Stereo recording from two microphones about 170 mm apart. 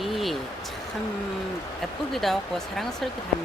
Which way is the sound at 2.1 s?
Centre (ahead or behind).